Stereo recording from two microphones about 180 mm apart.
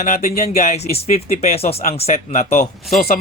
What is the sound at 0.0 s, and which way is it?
Speech, 40° left (ahead or behind).